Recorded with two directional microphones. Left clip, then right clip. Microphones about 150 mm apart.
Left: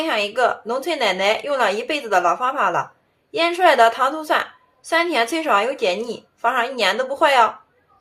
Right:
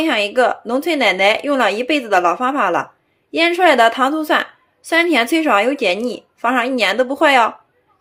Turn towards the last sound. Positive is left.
turn(degrees=-40)  # may be behind; listen again after turning